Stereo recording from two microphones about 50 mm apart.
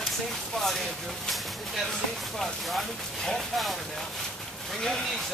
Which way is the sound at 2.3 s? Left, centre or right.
Centre.